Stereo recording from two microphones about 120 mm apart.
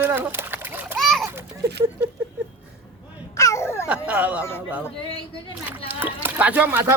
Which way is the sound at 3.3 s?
25° left (ahead or behind).